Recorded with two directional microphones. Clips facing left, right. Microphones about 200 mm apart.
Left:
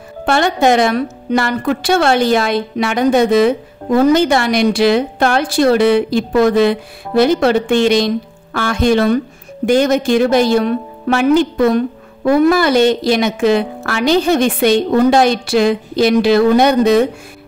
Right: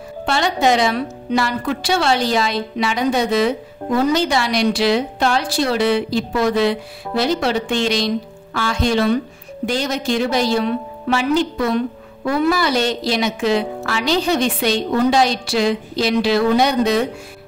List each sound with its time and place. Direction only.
0.2 s a woman's voice: 55° left (ahead or behind)